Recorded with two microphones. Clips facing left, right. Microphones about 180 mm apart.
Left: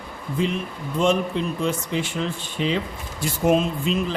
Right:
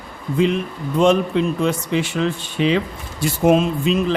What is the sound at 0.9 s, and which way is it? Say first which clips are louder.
A man's voice: right 5 dB; 70° right (ahead or behind).